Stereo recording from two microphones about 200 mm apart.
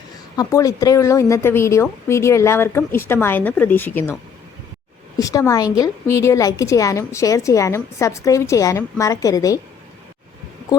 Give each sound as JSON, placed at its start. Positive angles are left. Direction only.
{"t": 0.3, "sound": "a woman's voice", "side_deg": 15}
{"t": 5.1, "sound": "a woman's voice", "side_deg": 15}